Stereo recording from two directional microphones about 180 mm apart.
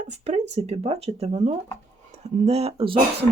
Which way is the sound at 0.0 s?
40° right (ahead or behind).